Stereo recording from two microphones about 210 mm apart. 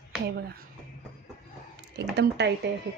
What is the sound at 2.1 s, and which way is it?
Speech, 55° right (ahead or behind).